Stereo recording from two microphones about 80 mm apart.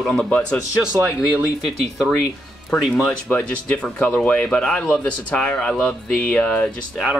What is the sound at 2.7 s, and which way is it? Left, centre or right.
Speech, centre.